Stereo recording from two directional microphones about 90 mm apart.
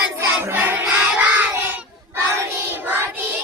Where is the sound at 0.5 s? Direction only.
20° right (ahead or behind).